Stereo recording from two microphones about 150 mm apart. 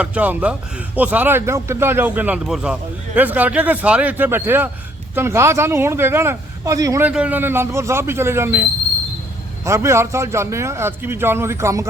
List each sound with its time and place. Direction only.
0.0 s a man's voice: 10° right (ahead or behind)
7.0 s a man's voice: 10° right (ahead or behind)
9.6 s a man's voice: 20° right (ahead or behind)